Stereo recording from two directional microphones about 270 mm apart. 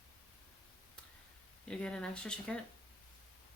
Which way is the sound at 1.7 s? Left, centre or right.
Centre.